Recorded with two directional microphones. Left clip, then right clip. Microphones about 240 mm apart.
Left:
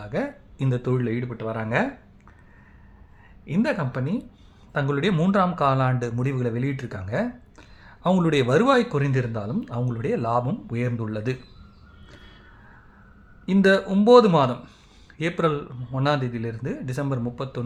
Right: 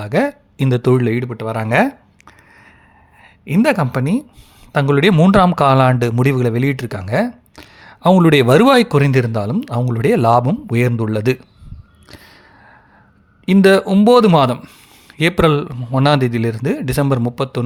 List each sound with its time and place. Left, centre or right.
0.0 s speech: right
3.4 s speech: right
13.4 s speech: right